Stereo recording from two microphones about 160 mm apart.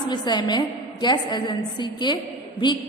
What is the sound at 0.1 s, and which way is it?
A woman's voice, 25° left (ahead or behind).